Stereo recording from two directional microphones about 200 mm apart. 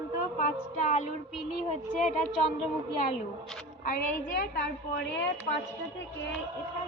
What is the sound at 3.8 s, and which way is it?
A woman's voice, 50° left (ahead or behind).